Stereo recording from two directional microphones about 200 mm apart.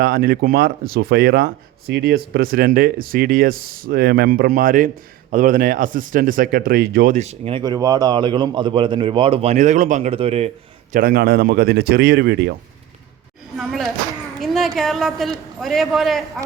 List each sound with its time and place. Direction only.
0.0 s speech: 50° right (ahead or behind); by 10.5 s 30° right (ahead or behind)
10.9 s speech: 50° right (ahead or behind)
13.6 s a sound: centre (ahead or behind)
14.8 s a man's voice: centre (ahead or behind)